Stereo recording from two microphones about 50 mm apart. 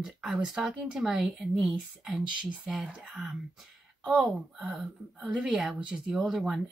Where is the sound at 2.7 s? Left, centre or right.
Centre.